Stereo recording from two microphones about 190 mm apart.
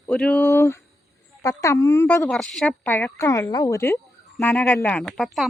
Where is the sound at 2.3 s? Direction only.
5° left (ahead or behind).